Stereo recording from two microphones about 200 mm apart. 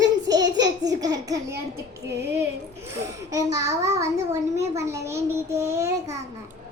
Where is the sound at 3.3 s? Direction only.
15° right (ahead or behind).